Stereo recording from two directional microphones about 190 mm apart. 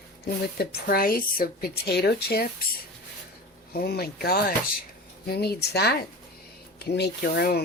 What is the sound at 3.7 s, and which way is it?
Speech, 55° left (ahead or behind).